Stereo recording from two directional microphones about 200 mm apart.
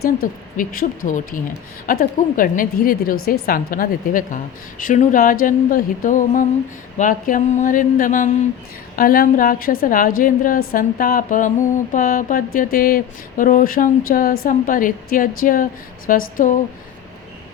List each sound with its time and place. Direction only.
0.0 s mantra: 45° left (ahead or behind)
4.8 s a sound: 40° left (ahead or behind)
9.0 s mantra: 45° left (ahead or behind)